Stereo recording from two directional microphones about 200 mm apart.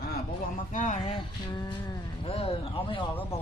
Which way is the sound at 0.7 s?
35° left (ahead or behind).